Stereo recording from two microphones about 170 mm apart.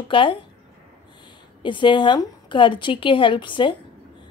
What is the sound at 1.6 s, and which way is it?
A woman's voice, 30° left (ahead or behind).